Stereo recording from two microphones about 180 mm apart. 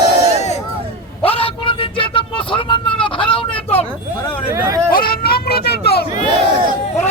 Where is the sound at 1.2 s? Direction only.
30° left (ahead or behind).